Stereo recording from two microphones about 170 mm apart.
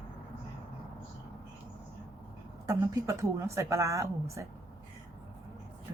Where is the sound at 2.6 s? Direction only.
20° right (ahead or behind).